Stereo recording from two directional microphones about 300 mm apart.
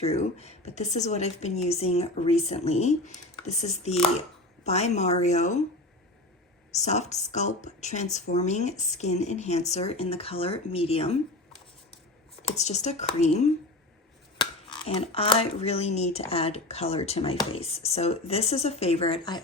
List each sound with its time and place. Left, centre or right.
0.0 s speech: left
6.7 s speech: left
12.4 s speech: left